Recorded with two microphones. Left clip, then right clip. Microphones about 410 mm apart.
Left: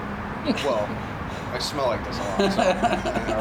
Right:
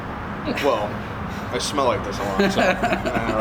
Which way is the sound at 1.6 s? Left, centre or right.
Right.